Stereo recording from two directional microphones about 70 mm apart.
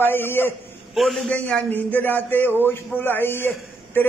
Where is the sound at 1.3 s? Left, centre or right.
Centre.